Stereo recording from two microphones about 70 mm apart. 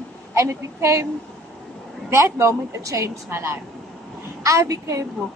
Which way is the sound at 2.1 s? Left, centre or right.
Right.